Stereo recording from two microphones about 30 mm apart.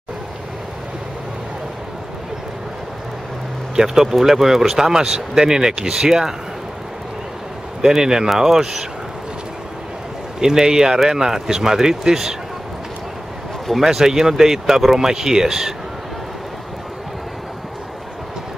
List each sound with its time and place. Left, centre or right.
3.7 s speech: centre
7.8 s speech: centre
10.4 s speech: centre
13.8 s speech: centre